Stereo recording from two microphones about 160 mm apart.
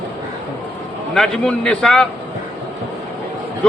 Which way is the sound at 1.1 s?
5° left (ahead or behind).